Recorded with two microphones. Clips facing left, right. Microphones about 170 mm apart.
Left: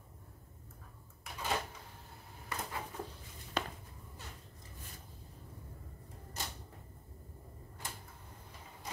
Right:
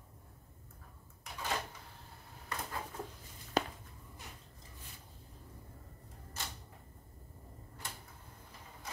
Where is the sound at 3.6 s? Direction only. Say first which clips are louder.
Right 4 dB; 40° right (ahead or behind).